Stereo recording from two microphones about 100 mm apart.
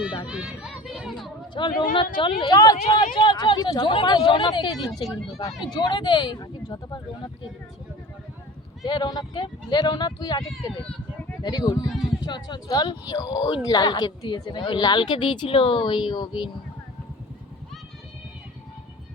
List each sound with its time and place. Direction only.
0.3 s run: 10° right (ahead or behind)
1.5 s speech: 50° left (ahead or behind)
5.0 s speech: centre (ahead or behind)
5.5 s speech: 45° left (ahead or behind)
8.8 s speech: 50° left (ahead or behind)
11.4 s speech: 45° left (ahead or behind)